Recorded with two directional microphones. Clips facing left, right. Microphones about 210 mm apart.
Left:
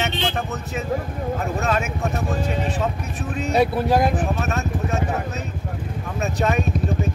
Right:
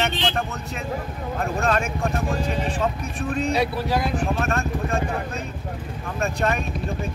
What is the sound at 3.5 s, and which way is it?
Speech, 45° left (ahead or behind).